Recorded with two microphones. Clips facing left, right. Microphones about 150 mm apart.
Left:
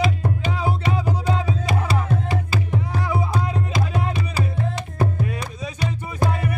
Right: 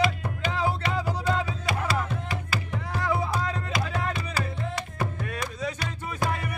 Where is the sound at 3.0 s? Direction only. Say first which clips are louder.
Even; 15° left (ahead or behind).